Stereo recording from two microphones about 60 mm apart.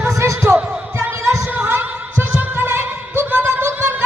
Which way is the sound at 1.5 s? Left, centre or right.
Right.